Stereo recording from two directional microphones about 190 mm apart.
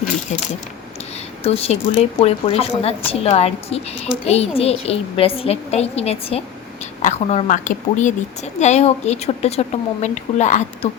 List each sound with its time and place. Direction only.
1.5 s a woman's voice: 35° left (ahead or behind)